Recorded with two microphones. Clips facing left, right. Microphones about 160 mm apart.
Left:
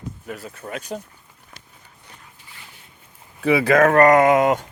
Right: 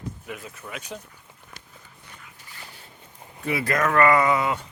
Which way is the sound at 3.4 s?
65° left (ahead or behind).